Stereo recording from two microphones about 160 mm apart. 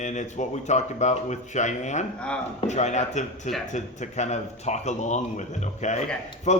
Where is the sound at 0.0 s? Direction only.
50° left (ahead or behind).